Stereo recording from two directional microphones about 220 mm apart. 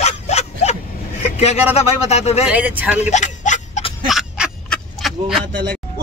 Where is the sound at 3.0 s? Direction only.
35° left (ahead or behind).